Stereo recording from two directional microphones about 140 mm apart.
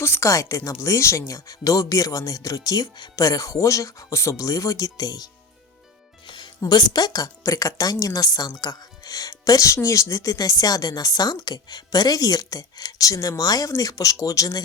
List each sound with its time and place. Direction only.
0.0 s speech: 20° left (ahead or behind)